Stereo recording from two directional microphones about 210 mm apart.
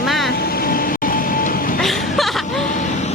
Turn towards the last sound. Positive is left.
turn(degrees=0)  # may be behind; listen again after turning